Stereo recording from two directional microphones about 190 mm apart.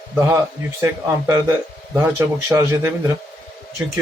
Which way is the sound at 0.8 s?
15° right (ahead or behind).